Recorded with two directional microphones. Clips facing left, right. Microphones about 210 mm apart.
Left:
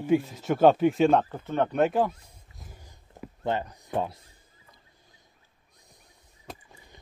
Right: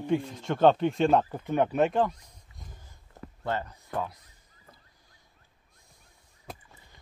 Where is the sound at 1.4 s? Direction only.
15° right (ahead or behind).